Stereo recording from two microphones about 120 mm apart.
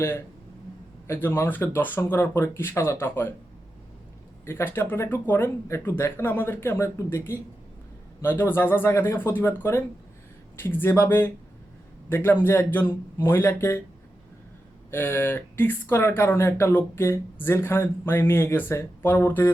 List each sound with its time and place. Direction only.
1.0 s speech: 20° left (ahead or behind)
4.4 s speech: 20° left (ahead or behind)
14.8 s speech: 15° left (ahead or behind)